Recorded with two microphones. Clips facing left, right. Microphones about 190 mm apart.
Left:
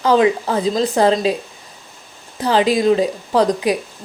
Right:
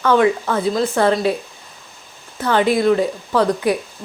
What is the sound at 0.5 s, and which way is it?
Speech, 15° left (ahead or behind).